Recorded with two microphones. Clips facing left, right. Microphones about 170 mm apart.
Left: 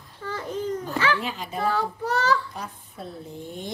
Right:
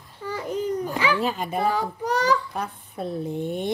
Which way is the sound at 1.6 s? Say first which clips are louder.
Even; 15° right (ahead or behind).